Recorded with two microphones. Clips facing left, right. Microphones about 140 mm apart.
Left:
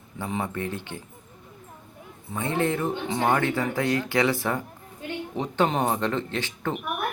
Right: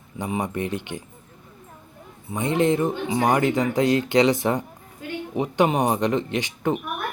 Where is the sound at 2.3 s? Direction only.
15° right (ahead or behind).